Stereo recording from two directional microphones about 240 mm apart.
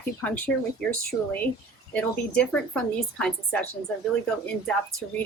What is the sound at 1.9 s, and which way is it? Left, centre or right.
A woman's voice, centre.